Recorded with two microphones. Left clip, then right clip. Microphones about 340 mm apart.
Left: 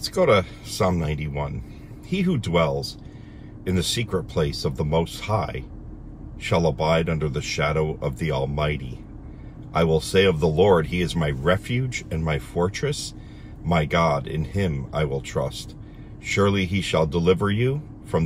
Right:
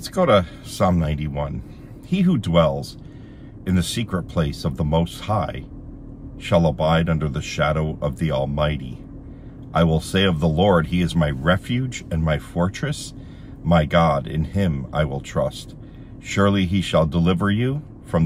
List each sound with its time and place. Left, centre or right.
0.0 s speech: centre